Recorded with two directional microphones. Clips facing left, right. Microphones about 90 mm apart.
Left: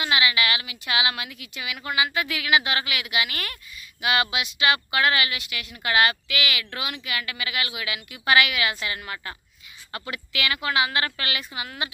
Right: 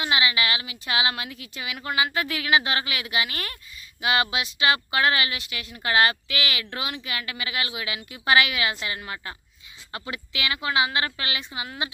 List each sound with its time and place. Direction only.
0.0 s a woman's voice: 25° right (ahead or behind)